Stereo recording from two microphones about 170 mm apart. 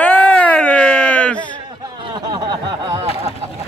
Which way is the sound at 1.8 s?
25° right (ahead or behind).